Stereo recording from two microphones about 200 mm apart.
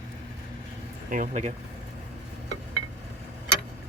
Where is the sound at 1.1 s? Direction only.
40° right (ahead or behind).